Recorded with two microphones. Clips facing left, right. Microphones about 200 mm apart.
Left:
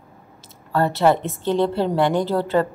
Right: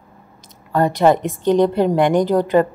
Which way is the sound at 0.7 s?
15° right (ahead or behind).